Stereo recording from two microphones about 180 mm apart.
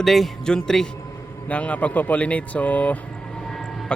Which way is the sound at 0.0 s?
Centre (ahead or behind).